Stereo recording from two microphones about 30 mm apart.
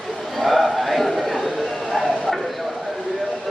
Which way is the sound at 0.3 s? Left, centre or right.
Centre.